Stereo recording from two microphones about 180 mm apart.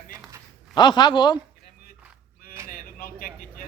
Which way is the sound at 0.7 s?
25° left (ahead or behind).